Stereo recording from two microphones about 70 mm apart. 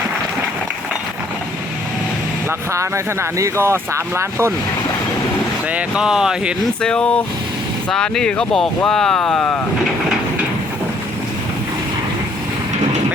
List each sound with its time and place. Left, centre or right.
2.7 s speech: right
5.7 s speech: centre
6.8 s speech: centre